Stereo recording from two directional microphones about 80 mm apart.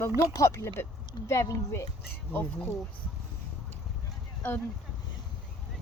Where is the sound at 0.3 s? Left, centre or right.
Left.